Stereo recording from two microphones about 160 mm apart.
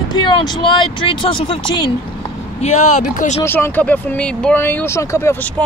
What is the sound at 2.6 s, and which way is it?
Speech, 45° left (ahead or behind).